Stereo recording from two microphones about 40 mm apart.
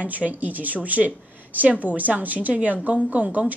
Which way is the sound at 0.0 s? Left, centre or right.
Right.